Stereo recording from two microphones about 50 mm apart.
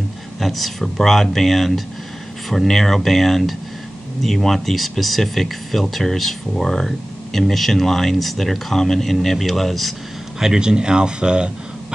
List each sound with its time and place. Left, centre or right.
0.4 s speech: centre
10.4 s speech: centre